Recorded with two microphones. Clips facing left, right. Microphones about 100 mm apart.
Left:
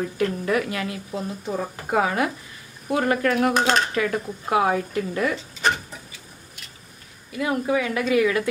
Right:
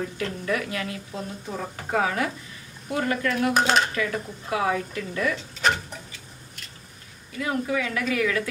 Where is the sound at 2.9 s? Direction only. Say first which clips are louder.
Left 4 dB; 45° left (ahead or behind).